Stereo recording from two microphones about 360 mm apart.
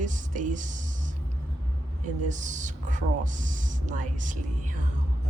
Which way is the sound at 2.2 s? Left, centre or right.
Right.